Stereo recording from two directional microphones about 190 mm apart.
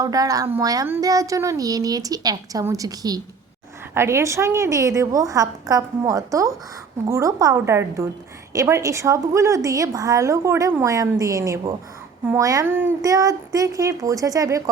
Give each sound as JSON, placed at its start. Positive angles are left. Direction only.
{"t": 0.0, "sound": "a woman's voice", "side_deg": -20}